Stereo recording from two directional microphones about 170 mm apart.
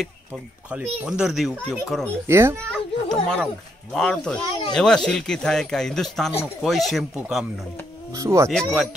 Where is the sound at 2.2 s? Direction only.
15° right (ahead or behind).